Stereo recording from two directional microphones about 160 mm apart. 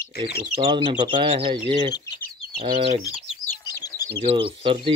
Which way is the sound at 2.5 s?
35° right (ahead or behind).